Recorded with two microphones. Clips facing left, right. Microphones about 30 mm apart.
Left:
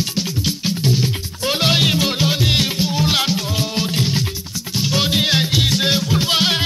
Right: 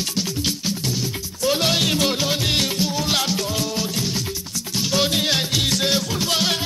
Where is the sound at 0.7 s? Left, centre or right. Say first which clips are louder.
Left 5 dB; left.